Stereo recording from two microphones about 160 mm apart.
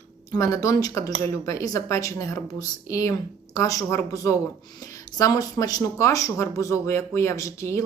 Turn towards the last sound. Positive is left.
turn(degrees=20)  # may be behind; listen again after turning